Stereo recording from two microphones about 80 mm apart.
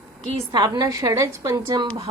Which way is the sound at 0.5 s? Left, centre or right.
Right.